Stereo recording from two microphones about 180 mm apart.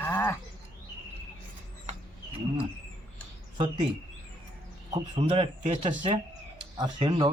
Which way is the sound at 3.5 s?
25° right (ahead or behind).